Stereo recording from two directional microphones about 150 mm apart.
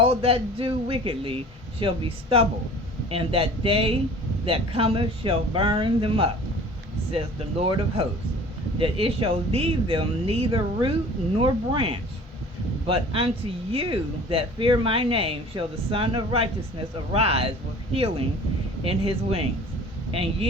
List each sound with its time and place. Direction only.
0.0 s speech: 40° right (ahead or behind)
7.6 s speech: 40° right (ahead or behind)
18.9 s speech: 40° right (ahead or behind)